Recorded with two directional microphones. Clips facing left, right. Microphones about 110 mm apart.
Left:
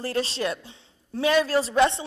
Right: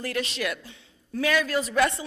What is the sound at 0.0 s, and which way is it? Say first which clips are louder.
A man's voice: left 3 dB; 30° left (ahead or behind).